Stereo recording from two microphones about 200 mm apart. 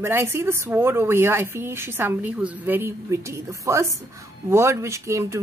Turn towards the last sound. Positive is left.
turn(degrees=-15)  # may be behind; listen again after turning